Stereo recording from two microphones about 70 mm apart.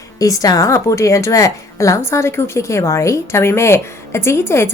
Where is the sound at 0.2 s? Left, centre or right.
Left.